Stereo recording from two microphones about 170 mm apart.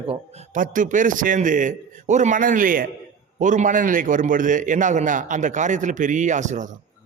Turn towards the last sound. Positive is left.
turn(degrees=-45)  # may be behind; listen again after turning